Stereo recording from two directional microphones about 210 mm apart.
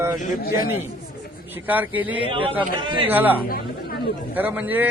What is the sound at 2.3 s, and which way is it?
Speech, 25° right (ahead or behind).